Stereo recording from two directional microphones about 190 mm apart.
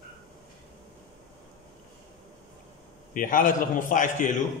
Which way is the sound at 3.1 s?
45° left (ahead or behind).